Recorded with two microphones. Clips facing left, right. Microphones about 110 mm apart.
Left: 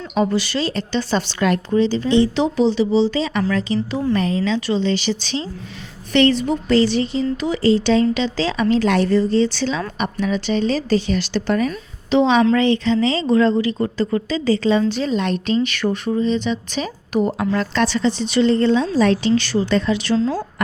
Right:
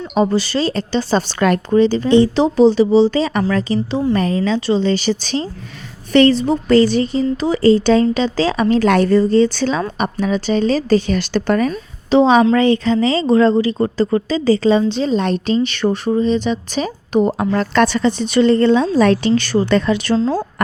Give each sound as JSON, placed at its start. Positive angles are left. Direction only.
{"t": 0.1, "sound": "speech", "side_deg": -35}
{"t": 2.3, "sound": "speech", "side_deg": -40}
{"t": 6.7, "sound": "speech", "side_deg": -45}
{"t": 11.7, "sound": "a woman's voice", "side_deg": -40}
{"t": 17.1, "sound": "a woman's voice", "side_deg": -30}
{"t": 17.5, "sound": "a woman's voice", "side_deg": -55}
{"t": 20.1, "sound": "speech", "side_deg": -35}